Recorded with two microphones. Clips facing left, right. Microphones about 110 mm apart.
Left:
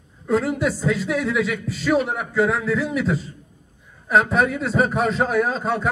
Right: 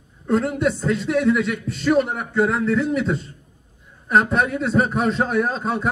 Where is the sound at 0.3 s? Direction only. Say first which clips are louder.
Right 1 dB; centre (ahead or behind).